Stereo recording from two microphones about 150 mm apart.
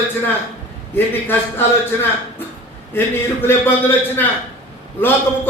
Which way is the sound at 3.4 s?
15° left (ahead or behind).